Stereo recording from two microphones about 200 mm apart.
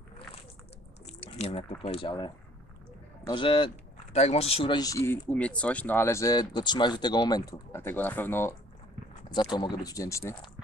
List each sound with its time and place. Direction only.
1.2 s speech: 30° left (ahead or behind); by 8.5 s 10° left (ahead or behind)
9.3 s speech: 20° left (ahead or behind)